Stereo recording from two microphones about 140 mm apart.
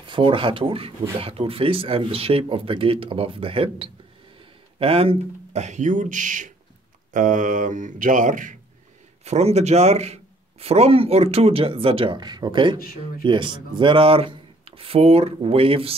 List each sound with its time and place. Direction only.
0.0 s speech: 35° right (ahead or behind); by 8.5 s 70° right (ahead or behind)
9.2 s a man's voice: 50° right (ahead or behind)